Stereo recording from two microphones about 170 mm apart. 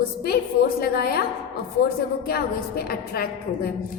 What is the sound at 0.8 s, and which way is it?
Speech, 65° left (ahead or behind).